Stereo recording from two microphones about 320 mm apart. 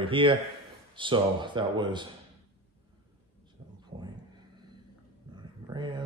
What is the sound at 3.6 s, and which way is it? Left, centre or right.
Thunder, centre.